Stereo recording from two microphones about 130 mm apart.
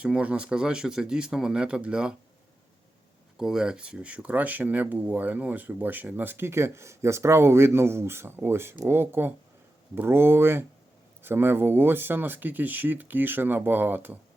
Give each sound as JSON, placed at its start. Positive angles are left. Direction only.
{"t": 0.0, "sound": "speech", "side_deg": -10}
{"t": 3.3, "sound": "speech", "side_deg": -5}